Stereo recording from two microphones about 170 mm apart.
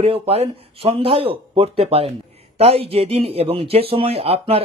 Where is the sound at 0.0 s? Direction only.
35° right (ahead or behind).